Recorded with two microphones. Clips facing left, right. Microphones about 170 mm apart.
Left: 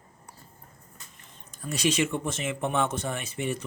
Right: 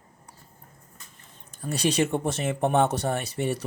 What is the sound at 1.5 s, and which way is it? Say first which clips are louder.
Speech: right 2 dB; 30° right (ahead or behind).